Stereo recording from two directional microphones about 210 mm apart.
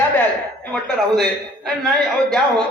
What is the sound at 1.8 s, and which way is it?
Speech, 5° left (ahead or behind).